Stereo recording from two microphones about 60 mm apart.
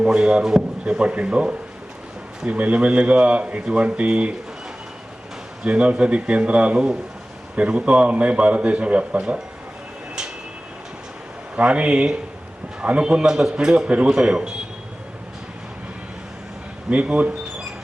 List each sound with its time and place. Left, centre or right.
0.0 s a man's voice: centre
5.6 s a man's voice: centre
11.5 s a man's voice: right
16.9 s a man's voice: right